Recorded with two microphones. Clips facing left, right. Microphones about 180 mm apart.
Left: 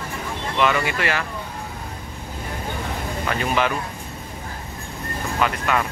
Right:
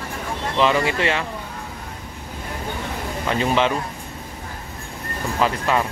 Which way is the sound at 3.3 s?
25° right (ahead or behind).